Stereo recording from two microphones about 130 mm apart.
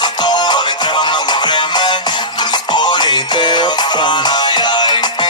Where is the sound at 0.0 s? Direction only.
35° left (ahead or behind).